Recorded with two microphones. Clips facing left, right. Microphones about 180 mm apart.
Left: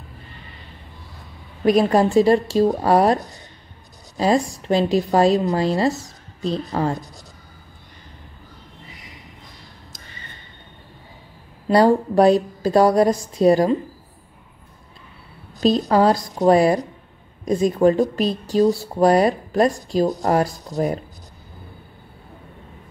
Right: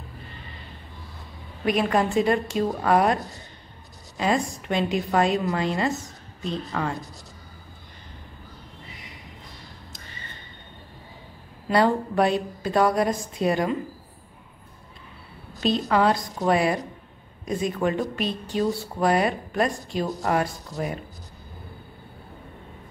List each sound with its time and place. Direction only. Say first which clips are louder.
1.6 s speech: left 7 dB; 35° left (ahead or behind)
4.2 s speech: left 5 dB; 35° left (ahead or behind)
11.7 s speech: left 6 dB; 35° left (ahead or behind)
15.6 s speech: left 5 dB; 40° left (ahead or behind)